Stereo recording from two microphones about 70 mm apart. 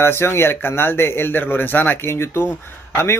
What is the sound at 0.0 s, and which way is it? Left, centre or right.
Speech, left.